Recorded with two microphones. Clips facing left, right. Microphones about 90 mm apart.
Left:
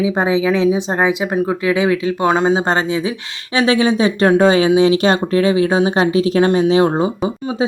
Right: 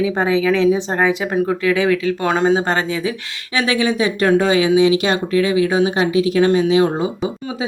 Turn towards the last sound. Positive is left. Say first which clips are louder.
# left 1 dB
turn(degrees=35)  # may be behind; listen again after turning